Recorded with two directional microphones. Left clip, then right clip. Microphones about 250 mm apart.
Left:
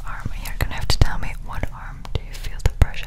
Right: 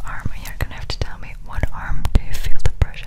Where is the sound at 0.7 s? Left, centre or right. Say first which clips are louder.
Left 5 dB; centre.